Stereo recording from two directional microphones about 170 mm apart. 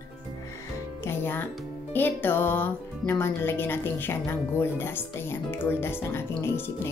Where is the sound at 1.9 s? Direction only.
10° left (ahead or behind).